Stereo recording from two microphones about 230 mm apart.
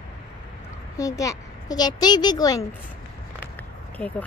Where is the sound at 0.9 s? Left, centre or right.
Centre.